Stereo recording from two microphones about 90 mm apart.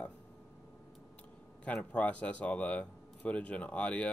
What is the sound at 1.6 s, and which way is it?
Speech, 15° left (ahead or behind).